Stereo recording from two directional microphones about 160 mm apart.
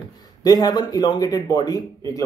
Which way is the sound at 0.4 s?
25° left (ahead or behind).